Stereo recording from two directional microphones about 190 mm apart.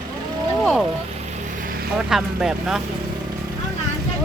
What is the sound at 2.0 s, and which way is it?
Speech, 5° right (ahead or behind).